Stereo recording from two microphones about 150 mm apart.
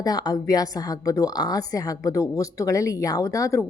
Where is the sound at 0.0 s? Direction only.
25° left (ahead or behind).